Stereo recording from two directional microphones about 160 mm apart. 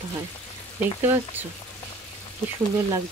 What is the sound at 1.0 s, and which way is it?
Speech, 15° right (ahead or behind).